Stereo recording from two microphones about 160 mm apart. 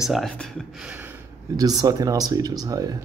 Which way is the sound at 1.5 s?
25° right (ahead or behind).